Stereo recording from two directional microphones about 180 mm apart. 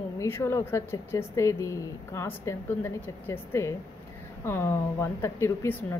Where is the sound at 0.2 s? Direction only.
15° left (ahead or behind).